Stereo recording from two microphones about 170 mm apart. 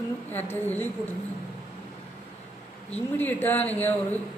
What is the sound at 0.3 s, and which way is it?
Speech, 10° left (ahead or behind).